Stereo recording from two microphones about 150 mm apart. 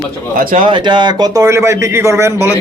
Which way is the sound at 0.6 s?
30° right (ahead or behind).